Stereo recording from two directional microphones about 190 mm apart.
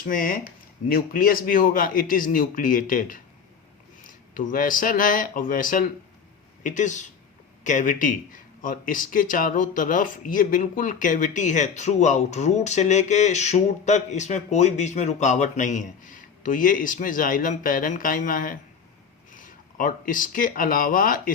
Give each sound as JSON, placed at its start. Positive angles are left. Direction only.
{"t": 0.0, "sound": "a man's voice", "side_deg": 50}